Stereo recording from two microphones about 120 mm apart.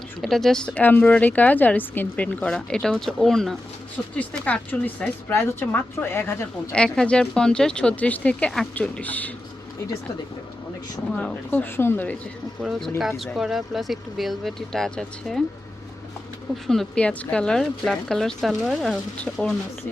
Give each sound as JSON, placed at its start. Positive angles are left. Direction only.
{"t": 0.2, "sound": "speech", "side_deg": 0}
{"t": 6.7, "sound": "speech", "side_deg": 5}
{"t": 11.1, "sound": "speech", "side_deg": 10}
{"t": 13.0, "sound": "speech", "side_deg": 0}
{"t": 16.6, "sound": "speech", "side_deg": 5}